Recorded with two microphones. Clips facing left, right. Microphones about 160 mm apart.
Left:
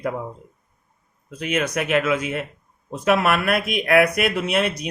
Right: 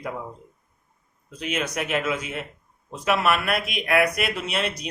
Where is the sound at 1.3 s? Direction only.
55° left (ahead or behind).